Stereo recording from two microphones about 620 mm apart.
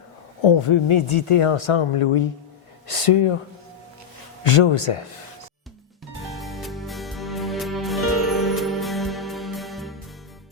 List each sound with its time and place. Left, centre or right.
0.4 s speech: left
4.5 s speech: left
6.3 s music: centre